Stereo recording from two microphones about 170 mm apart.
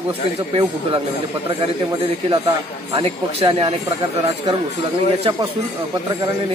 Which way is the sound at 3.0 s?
30° right (ahead or behind).